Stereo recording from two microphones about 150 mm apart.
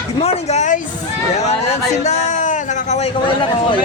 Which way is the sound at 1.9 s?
50° left (ahead or behind).